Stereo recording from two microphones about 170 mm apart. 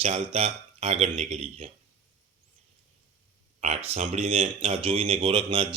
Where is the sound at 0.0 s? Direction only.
35° right (ahead or behind).